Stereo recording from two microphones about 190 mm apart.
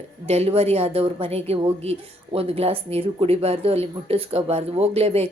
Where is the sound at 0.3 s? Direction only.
30° right (ahead or behind).